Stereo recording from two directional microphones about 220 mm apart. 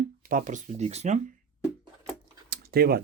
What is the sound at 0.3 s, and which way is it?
Speech, 35° right (ahead or behind).